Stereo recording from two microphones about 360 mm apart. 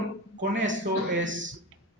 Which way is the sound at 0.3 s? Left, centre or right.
Right.